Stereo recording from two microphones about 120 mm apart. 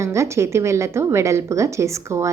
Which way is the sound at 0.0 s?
25° right (ahead or behind).